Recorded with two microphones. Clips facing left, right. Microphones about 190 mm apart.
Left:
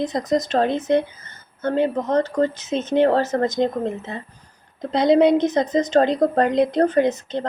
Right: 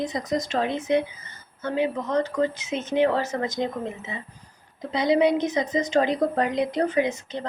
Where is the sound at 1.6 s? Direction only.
55° left (ahead or behind).